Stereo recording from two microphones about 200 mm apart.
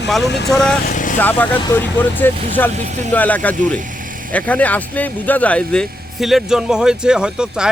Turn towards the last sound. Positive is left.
turn(degrees=-5)  # may be behind; listen again after turning